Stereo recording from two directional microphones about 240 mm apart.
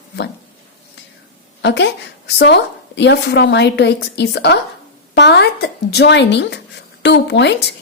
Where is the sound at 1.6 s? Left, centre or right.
Left.